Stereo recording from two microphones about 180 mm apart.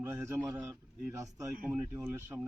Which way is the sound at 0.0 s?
15° right (ahead or behind).